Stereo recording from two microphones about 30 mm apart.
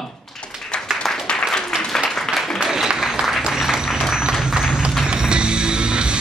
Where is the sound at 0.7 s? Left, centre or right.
Left.